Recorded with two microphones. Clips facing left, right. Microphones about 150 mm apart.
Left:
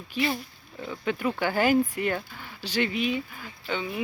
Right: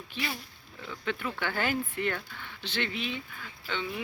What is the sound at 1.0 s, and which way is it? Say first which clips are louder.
Speech: left 6 dB; 15° left (ahead or behind).